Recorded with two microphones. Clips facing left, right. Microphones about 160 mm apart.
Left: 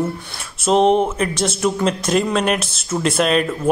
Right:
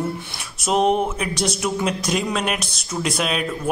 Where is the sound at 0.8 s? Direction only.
30° left (ahead or behind).